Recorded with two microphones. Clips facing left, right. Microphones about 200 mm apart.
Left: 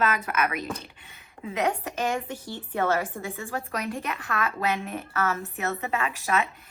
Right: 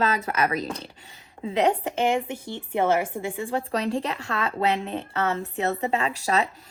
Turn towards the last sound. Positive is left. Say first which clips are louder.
# right 2 dB
turn(degrees=-35)  # may be behind; listen again after turning